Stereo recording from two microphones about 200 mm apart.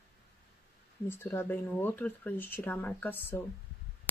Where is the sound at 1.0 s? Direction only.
10° left (ahead or behind).